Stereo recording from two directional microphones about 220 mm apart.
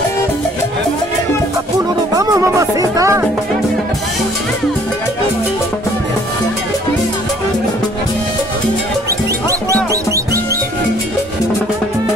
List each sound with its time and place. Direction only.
2.1 s music: 15° right (ahead or behind)